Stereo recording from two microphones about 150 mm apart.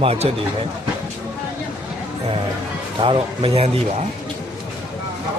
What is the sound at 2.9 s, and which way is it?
Speech, 35° right (ahead or behind).